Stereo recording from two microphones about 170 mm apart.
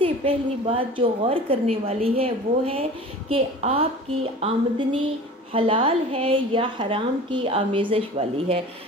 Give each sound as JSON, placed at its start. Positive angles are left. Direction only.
{"t": 0.0, "sound": "a woman's voice", "side_deg": -30}